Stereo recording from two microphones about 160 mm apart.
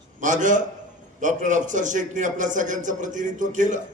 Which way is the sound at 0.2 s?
50° right (ahead or behind).